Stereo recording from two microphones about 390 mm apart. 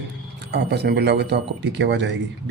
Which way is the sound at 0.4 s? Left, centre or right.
Right.